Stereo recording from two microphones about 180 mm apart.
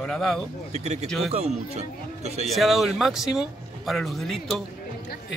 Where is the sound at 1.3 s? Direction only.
35° right (ahead or behind).